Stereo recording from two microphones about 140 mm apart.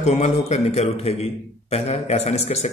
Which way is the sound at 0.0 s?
50° left (ahead or behind).